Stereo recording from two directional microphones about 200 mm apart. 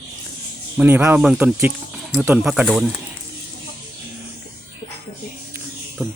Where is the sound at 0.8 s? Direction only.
10° right (ahead or behind).